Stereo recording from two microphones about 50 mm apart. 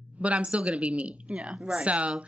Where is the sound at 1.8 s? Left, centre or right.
Right.